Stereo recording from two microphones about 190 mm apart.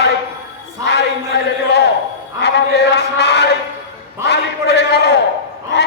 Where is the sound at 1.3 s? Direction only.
65° left (ahead or behind).